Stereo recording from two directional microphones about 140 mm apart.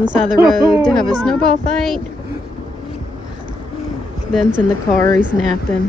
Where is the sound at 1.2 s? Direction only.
5° left (ahead or behind).